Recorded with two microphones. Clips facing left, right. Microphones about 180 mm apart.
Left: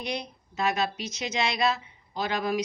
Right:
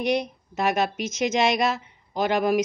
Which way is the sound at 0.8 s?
50° right (ahead or behind).